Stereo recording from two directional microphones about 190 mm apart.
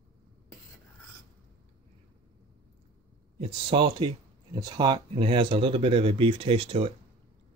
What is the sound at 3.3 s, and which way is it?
Speech, 30° right (ahead or behind).